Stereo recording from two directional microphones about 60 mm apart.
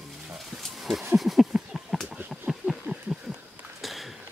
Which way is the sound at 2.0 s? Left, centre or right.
Right.